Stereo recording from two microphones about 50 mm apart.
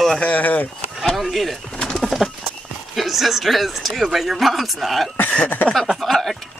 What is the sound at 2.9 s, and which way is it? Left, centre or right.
Speech, centre.